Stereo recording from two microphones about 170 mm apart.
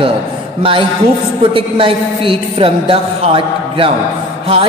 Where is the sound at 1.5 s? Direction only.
30° right (ahead or behind).